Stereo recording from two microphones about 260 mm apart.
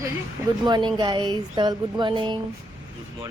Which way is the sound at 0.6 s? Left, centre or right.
Centre.